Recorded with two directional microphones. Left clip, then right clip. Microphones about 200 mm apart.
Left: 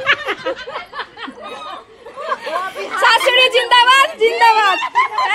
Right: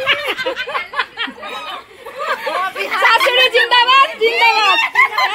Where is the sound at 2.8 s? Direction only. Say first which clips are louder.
Even; 5° left (ahead or behind).